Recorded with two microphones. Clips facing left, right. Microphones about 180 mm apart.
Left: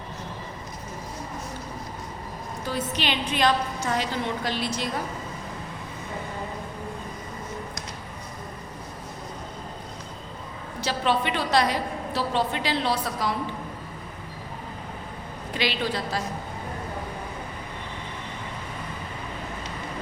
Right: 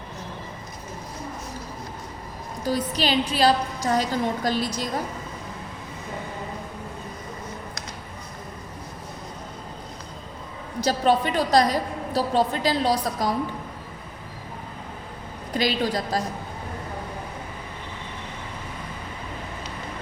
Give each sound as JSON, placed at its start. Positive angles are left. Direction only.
{"t": 2.6, "sound": "a woman's voice", "side_deg": -35}
{"t": 10.8, "sound": "a woman's voice", "side_deg": -40}
{"t": 15.5, "sound": "a woman's voice", "side_deg": -40}